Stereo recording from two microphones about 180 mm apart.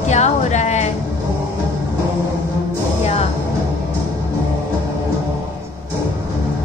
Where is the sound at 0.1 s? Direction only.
40° left (ahead or behind).